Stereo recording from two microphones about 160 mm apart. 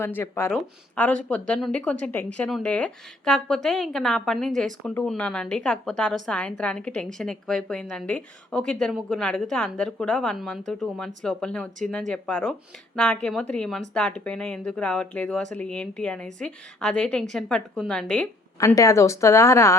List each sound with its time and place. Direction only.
0.0 s a woman's voice: 15° left (ahead or behind)
18.6 s a woman's voice: 20° left (ahead or behind)